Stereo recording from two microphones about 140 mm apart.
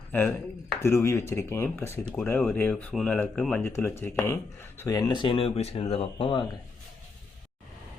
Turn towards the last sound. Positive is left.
turn(degrees=35)  # may be behind; listen again after turning